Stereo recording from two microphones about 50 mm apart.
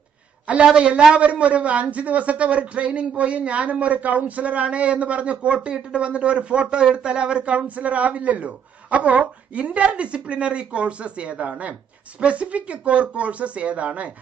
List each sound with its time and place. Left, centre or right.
0.7 s a man's voice: right